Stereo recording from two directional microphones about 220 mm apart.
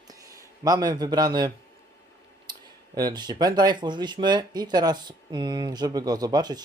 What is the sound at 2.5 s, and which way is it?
Speech, 20° right (ahead or behind).